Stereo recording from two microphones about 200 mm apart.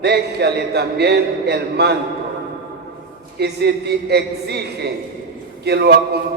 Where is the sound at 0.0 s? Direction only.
55° right (ahead or behind).